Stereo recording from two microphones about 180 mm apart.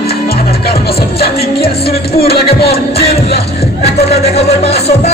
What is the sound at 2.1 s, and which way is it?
Music, 60° left (ahead or behind).